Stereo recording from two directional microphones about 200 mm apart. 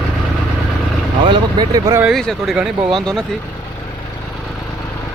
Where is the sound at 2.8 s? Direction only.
25° right (ahead or behind).